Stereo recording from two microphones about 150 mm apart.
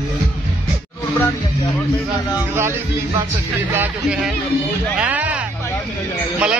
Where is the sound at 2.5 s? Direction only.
15° right (ahead or behind).